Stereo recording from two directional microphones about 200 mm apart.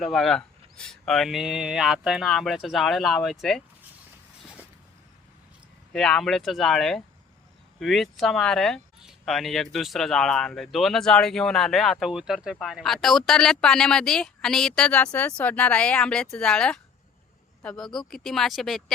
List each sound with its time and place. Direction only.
0.0 s speech: centre (ahead or behind)
5.9 s speech: 5° left (ahead or behind)